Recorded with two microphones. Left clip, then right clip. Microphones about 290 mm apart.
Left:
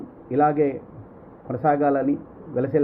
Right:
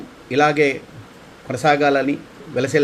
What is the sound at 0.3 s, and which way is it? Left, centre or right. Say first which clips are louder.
Speech: right 4 dB; right.